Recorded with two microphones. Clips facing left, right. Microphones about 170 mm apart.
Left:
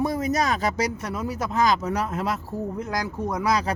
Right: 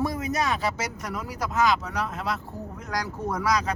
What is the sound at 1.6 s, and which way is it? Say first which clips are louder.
Speech: left 2 dB; 40° left (ahead or behind).